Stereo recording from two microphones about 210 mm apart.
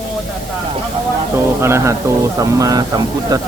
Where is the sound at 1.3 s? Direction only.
10° right (ahead or behind).